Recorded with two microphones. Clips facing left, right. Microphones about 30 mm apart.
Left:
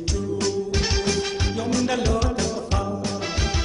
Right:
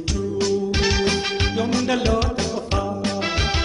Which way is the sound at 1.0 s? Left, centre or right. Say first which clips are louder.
Right 3 dB; right.